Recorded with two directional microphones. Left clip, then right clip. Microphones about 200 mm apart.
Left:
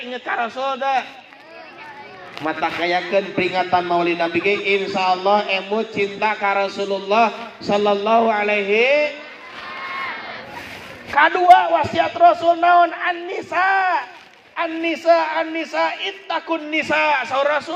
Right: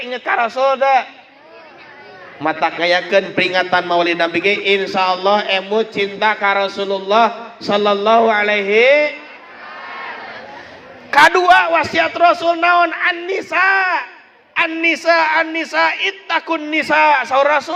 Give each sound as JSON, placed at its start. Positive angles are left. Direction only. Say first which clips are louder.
{"t": 0.1, "sound": "a man's voice", "louder": "right 6 dB", "side_deg": -50}
{"t": 2.4, "sound": "a man's voice", "louder": "right 5 dB", "side_deg": -50}
{"t": 11.1, "sound": "a man's voice", "louder": "right 2 dB", "side_deg": -60}